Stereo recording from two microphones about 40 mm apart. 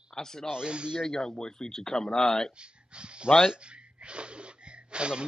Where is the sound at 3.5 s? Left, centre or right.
Right.